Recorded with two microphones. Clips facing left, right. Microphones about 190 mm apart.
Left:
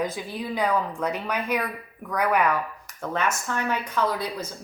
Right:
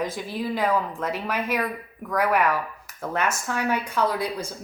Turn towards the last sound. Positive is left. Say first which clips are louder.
# right 1 dB
turn(degrees=-10)  # may be behind; listen again after turning